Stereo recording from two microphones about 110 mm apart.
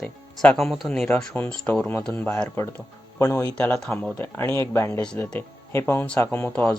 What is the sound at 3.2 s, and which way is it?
Speech, 30° left (ahead or behind).